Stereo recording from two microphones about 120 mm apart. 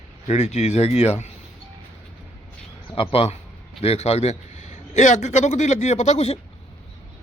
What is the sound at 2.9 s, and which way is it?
A man's voice, 50° left (ahead or behind).